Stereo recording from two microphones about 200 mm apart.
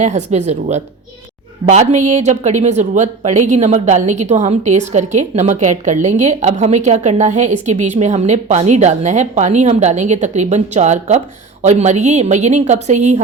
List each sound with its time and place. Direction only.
0.3 s a woman's voice: 35° right (ahead or behind)